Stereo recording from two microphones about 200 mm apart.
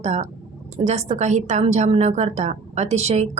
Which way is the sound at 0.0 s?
35° right (ahead or behind).